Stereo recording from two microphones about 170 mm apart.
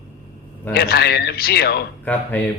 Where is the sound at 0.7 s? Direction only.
75° left (ahead or behind).